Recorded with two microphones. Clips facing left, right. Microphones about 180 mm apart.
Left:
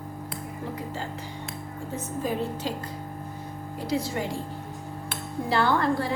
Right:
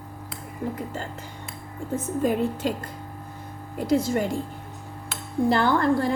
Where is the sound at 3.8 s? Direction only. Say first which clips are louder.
Right 6 dB; 50° right (ahead or behind).